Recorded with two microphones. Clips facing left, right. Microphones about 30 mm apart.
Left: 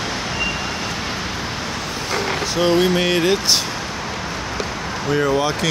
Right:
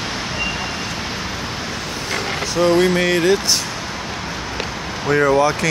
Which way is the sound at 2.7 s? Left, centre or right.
Centre.